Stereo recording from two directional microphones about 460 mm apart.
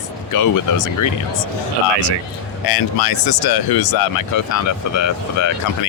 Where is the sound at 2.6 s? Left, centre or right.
Left.